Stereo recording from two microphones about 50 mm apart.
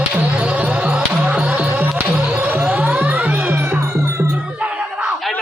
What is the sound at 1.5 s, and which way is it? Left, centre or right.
Music, right.